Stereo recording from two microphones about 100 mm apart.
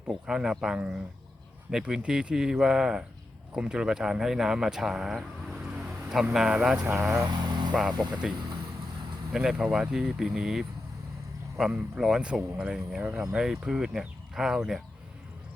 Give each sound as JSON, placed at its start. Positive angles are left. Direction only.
{"t": 0.1, "sound": "speech", "side_deg": -5}
{"t": 5.7, "sound": "vehicle", "side_deg": -5}
{"t": 6.3, "sound": "speech", "side_deg": -5}
{"t": 7.3, "sound": "vehicle", "side_deg": -50}
{"t": 7.7, "sound": "speech", "side_deg": -10}
{"t": 7.9, "sound": "speech", "side_deg": -45}
{"t": 9.3, "sound": "speech", "side_deg": -5}